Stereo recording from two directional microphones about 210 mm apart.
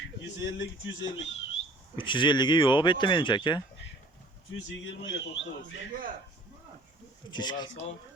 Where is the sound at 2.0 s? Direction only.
25° left (ahead or behind).